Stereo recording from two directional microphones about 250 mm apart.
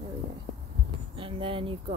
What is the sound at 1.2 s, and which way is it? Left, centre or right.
Speech, right.